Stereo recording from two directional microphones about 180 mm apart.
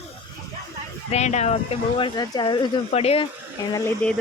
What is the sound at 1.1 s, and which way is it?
Speech, 40° left (ahead or behind).